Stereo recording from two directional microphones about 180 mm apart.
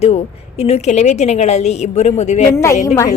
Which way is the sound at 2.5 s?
15° left (ahead or behind).